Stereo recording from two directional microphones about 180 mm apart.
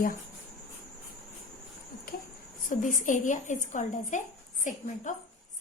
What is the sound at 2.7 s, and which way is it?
A woman's voice, 45° left (ahead or behind).